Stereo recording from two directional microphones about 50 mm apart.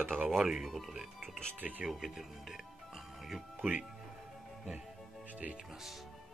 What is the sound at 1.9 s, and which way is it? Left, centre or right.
Music, centre.